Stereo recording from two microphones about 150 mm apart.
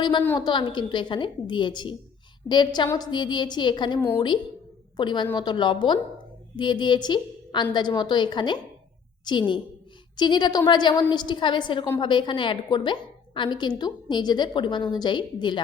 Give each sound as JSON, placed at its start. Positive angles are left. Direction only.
{"t": 0.0, "sound": "a woman's voice", "side_deg": 30}